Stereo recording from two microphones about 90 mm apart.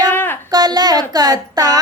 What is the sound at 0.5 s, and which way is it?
Speech, 45° right (ahead or behind).